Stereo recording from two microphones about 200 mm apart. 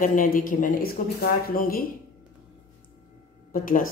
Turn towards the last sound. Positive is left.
turn(degrees=45)  # may be behind; listen again after turning